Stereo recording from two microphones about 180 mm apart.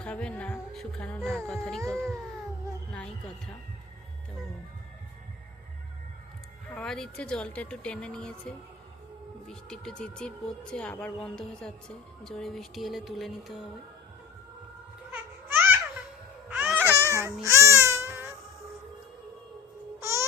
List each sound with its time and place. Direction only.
0.0 s speech: 5° left (ahead or behind)
6.7 s speech: 5° left (ahead or behind)
15.1 s babbling: 10° right (ahead or behind)
16.5 s baby cry: 10° right (ahead or behind)
16.9 s baby cry: 15° left (ahead or behind)
17.4 s baby cry: 15° right (ahead or behind)
18.1 s cat: 15° right (ahead or behind)
20.0 s music: 15° right (ahead or behind)